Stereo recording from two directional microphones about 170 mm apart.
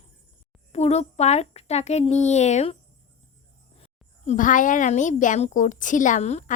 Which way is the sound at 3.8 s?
45° left (ahead or behind).